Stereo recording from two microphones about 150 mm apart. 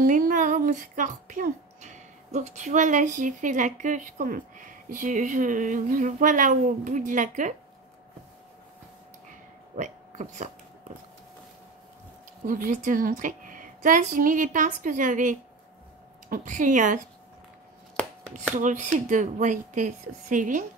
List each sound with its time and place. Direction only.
0.0 s speech: 65° right (ahead or behind)
9.8 s speech: 55° right (ahead or behind)
12.4 s speech: 60° right (ahead or behind)
18.6 s speech: 55° right (ahead or behind)